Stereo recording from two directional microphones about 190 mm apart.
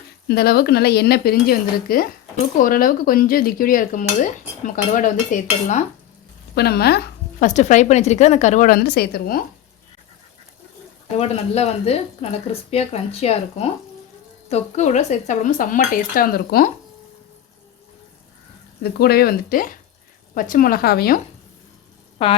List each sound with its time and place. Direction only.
0.3 s speech: 55° left (ahead or behind)
2.6 s dishes: 45° left (ahead or behind)
6.5 s a woman's voice: 55° left (ahead or behind)
7.4 s speech: 40° left (ahead or behind)
11.2 s speech: 30° left (ahead or behind)
14.5 s dishes: 35° left (ahead or behind)
18.8 s dishes: 55° left (ahead or behind)
22.2 s speech: 30° left (ahead or behind)